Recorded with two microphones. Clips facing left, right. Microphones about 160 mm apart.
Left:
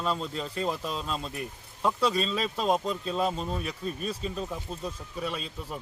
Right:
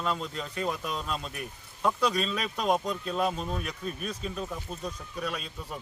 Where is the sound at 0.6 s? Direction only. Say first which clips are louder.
Even; 30° left (ahead or behind).